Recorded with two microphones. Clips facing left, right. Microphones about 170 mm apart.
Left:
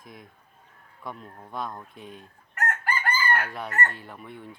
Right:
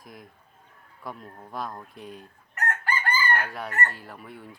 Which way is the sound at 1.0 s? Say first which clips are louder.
Even; centre (ahead or behind).